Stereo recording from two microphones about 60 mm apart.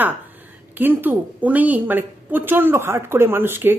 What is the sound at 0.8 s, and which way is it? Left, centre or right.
A woman's voice, right.